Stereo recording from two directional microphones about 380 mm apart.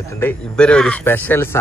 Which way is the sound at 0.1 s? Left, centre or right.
Centre.